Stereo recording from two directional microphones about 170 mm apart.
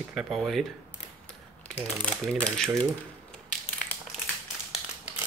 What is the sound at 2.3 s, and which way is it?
Speech, 5° left (ahead or behind).